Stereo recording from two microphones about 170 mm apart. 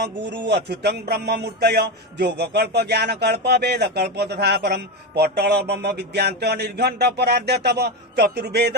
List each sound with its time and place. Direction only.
0.0 s music: 85° right; by 8.7 s 70° right (ahead or behind)